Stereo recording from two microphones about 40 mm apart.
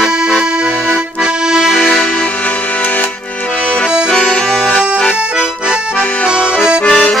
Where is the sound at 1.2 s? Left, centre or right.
Centre.